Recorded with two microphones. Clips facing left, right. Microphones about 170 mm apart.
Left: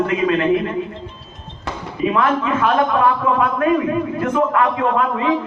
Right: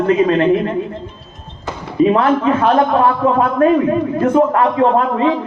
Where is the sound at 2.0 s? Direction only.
35° right (ahead or behind).